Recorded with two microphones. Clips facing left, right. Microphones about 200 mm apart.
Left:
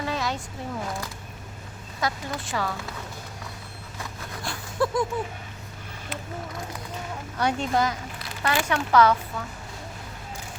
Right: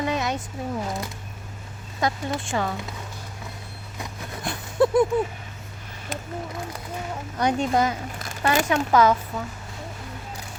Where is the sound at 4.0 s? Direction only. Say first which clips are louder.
Right 3 dB; 20° right (ahead or behind).